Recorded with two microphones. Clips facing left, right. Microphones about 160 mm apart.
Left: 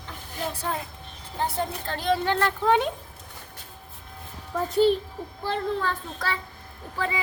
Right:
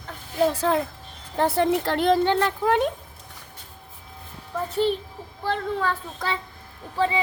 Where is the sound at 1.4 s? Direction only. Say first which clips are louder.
Right 8 dB; 75° right (ahead or behind).